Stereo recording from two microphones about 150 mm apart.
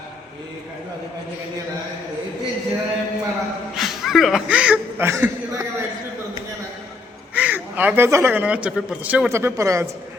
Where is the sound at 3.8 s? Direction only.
Centre (ahead or behind); by 5.7 s 15° right (ahead or behind).